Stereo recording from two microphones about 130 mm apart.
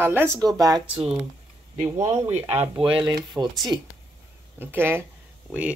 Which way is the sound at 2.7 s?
45° right (ahead or behind).